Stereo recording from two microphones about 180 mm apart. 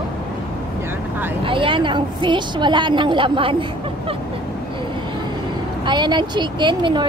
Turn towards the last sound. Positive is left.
turn(degrees=-25)  # may be behind; listen again after turning